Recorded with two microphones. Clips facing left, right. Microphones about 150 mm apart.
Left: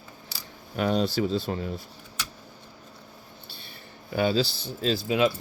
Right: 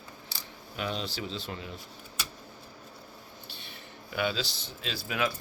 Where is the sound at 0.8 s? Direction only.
45° left (ahead or behind).